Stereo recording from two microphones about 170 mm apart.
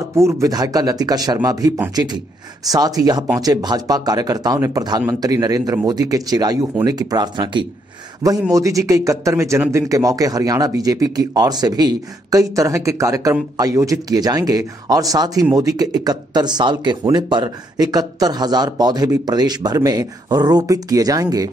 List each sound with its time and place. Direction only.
0.1 s a man's voice: 15° right (ahead or behind)